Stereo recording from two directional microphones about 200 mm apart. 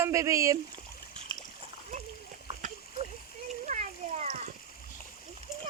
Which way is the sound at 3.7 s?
35° right (ahead or behind).